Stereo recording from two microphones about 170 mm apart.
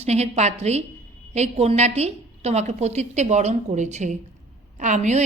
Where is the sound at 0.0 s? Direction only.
40° right (ahead or behind).